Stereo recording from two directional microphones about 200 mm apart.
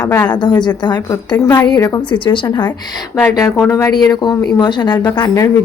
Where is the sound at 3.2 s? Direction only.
10° left (ahead or behind).